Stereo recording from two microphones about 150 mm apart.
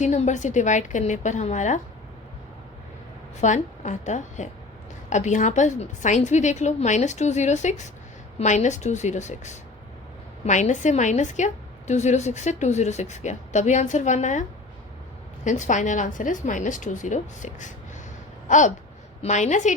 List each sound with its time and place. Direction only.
0.0 s a woman's voice: 55° left (ahead or behind)
3.4 s a woman's voice: 55° left (ahead or behind)
15.4 s a woman's voice: 55° left (ahead or behind)
18.4 s a sound: 55° left (ahead or behind)
19.2 s a woman's voice: 50° left (ahead or behind)